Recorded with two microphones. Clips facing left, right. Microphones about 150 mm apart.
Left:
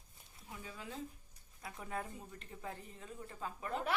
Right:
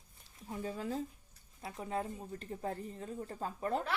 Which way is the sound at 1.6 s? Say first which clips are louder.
Right 5 dB; 30° right (ahead or behind).